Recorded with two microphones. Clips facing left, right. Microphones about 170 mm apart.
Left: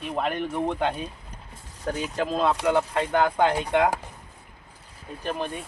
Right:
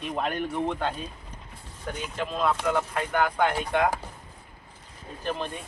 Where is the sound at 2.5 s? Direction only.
25° left (ahead or behind).